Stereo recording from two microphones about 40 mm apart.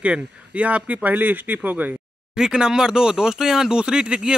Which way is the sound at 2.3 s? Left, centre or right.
Centre.